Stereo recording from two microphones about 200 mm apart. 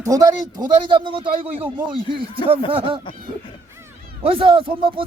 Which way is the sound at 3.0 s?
25° left (ahead or behind).